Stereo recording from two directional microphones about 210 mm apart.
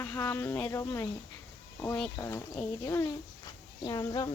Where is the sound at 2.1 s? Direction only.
15° left (ahead or behind).